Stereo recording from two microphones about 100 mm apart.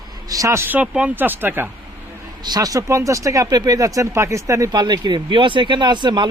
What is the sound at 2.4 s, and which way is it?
Speech, 40° right (ahead or behind).